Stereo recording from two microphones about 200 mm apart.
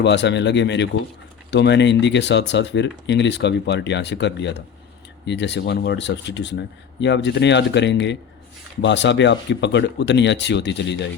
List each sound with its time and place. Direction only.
0.0 s speech: 60° left (ahead or behind)